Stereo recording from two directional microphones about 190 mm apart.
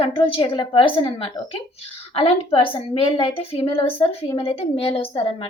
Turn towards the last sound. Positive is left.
turn(degrees=30)  # may be behind; listen again after turning